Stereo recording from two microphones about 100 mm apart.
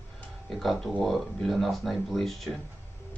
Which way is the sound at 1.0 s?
Centre (ahead or behind).